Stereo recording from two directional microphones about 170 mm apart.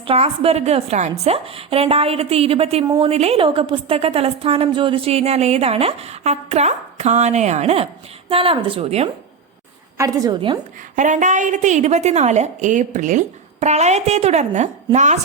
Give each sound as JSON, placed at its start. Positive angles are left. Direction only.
{"t": 0.0, "sound": "a woman's voice", "side_deg": -35}
{"t": 2.8, "sound": "a woman's voice", "side_deg": -20}
{"t": 3.1, "sound": "a woman's voice", "side_deg": -35}
{"t": 10.0, "sound": "a woman's voice", "side_deg": -20}
{"t": 10.9, "sound": "a woman's voice", "side_deg": -45}